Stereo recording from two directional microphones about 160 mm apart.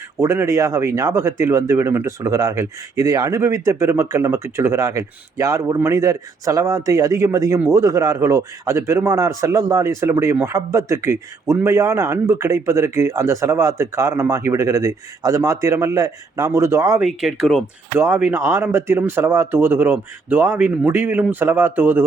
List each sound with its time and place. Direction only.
0.2 s speech: 15° right (ahead or behind)
17.0 s speech: centre (ahead or behind)